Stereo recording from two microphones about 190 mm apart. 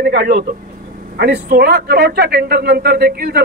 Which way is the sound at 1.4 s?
55° right (ahead or behind).